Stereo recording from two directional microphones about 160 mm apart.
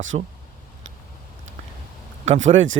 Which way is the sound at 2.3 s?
45° right (ahead or behind).